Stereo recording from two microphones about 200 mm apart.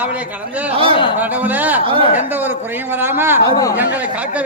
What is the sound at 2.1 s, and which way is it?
A man's voice, 10° right (ahead or behind).